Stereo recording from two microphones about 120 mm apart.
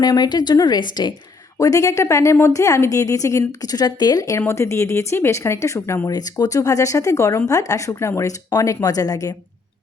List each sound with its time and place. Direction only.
0.0 s a woman's voice: 35° left (ahead or behind)
1.5 s speech: 25° left (ahead or behind)